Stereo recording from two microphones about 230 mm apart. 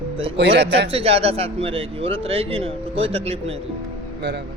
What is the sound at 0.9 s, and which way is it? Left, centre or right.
A man's voice, right.